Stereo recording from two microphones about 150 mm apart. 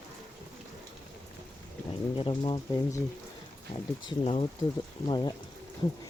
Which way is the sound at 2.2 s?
35° left (ahead or behind).